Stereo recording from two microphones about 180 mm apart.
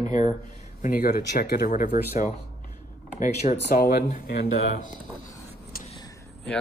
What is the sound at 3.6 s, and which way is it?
Speech, 60° left (ahead or behind).